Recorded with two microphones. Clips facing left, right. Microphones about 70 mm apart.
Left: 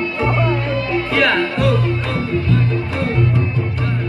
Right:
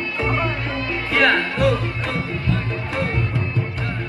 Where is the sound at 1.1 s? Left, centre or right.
Right.